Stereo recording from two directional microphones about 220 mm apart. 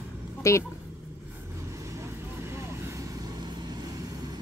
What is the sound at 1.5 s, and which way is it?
Vehicle, 15° right (ahead or behind).